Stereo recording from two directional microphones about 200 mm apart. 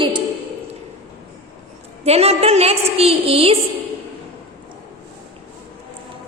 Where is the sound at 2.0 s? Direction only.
30° right (ahead or behind).